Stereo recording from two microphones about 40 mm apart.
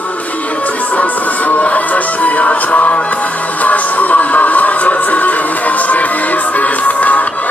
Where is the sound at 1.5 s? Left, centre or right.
Left.